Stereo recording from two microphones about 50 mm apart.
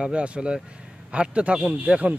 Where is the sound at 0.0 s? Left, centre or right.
Right.